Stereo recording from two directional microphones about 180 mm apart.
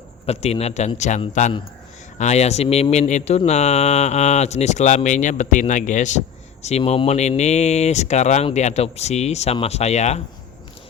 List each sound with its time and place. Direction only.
0.3 s speech: 35° left (ahead or behind)